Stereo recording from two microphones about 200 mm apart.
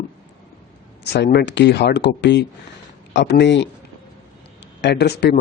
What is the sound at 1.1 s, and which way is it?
Speech, 55° left (ahead or behind).